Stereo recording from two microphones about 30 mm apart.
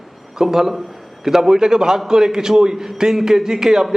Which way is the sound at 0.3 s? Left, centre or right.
Centre.